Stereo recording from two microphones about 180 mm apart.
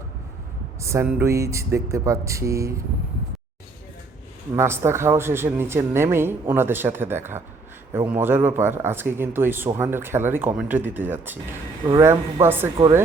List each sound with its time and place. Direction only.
0.8 s speech: 15° right (ahead or behind)
4.5 s speech: 15° right (ahead or behind)